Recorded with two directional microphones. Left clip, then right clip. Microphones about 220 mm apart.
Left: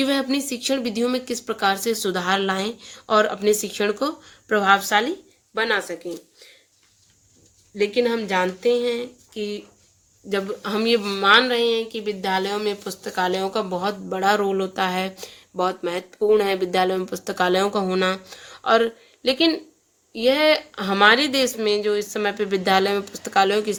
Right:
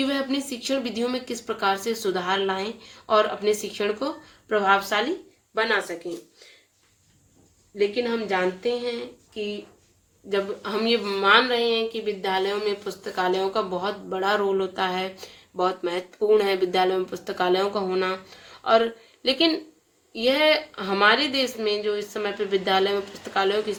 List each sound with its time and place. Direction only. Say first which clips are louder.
0.0 s speech: left 4 dB; 50° left (ahead or behind)
7.8 s speech: left 3 dB; 50° left (ahead or behind)